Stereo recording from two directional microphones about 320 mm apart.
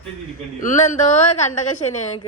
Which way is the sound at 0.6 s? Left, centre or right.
Left.